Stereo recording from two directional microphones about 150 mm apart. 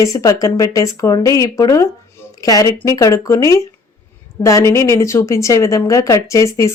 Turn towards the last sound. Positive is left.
turn(degrees=20)  # may be behind; listen again after turning